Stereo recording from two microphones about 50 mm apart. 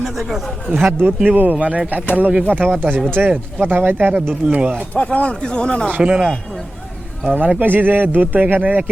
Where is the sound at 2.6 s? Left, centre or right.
Right.